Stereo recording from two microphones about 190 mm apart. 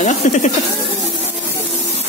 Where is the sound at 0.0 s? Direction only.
40° left (ahead or behind).